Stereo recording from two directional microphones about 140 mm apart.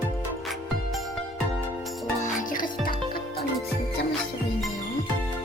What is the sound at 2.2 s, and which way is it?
Music, 70° left (ahead or behind).